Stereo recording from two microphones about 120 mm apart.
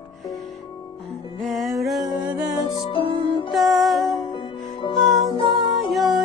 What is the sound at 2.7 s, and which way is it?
Music, 45° left (ahead or behind).